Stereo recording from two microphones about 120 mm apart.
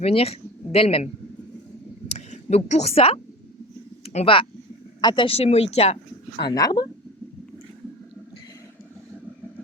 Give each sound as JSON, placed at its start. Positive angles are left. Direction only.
{"t": 0.0, "sound": "speech", "side_deg": 55}
{"t": 2.0, "sound": "a sound", "side_deg": 60}
{"t": 4.0, "sound": "speech", "side_deg": 60}
{"t": 4.9, "sound": "speech", "side_deg": 40}
{"t": 6.4, "sound": "speech", "side_deg": 30}